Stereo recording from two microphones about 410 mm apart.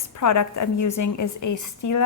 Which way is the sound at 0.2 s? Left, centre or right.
Left.